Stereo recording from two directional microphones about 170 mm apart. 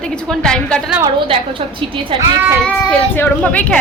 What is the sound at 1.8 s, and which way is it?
Speech, 30° right (ahead or behind).